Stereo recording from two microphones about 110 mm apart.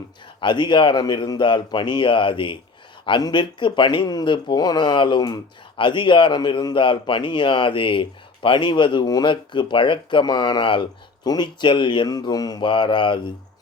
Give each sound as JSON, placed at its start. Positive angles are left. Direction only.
{"t": 0.3, "sound": "speech", "side_deg": 45}